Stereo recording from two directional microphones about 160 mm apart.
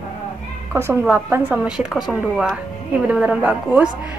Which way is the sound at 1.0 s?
10° right (ahead or behind).